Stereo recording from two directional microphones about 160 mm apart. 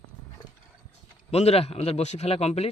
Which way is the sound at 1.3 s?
40° left (ahead or behind).